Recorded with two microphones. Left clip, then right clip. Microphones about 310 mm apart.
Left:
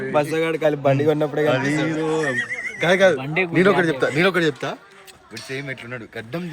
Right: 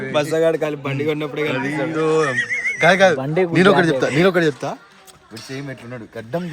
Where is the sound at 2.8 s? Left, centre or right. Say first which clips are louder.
Right 2 dB; right.